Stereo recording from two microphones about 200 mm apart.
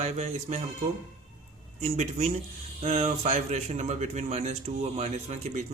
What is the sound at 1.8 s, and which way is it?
Speech, 35° right (ahead or behind).